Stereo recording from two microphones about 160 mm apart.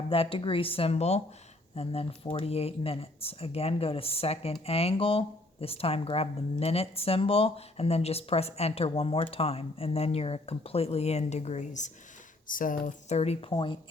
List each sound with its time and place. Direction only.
0.1 s speech: 35° left (ahead or behind)